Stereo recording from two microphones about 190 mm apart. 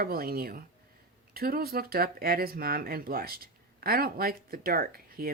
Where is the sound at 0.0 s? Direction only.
50° right (ahead or behind).